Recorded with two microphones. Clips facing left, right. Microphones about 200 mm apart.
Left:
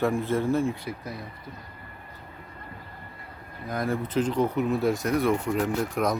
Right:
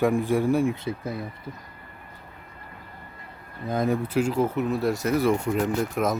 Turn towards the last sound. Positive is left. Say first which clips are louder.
# right 1 dB
turn(degrees=0)  # may be behind; listen again after turning